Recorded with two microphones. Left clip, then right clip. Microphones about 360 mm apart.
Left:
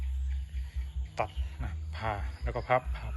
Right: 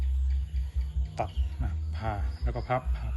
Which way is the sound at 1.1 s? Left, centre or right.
Centre.